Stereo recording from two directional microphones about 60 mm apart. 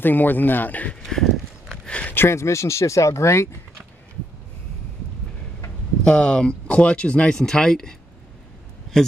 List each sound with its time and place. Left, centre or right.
0.0 s speech: left
1.0 s horse: centre
1.9 s a sound: centre
2.1 s speech: left
6.0 s speech: centre
9.0 s speech: centre